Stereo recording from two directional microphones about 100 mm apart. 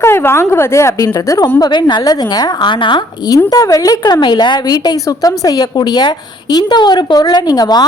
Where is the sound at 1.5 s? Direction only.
45° left (ahead or behind).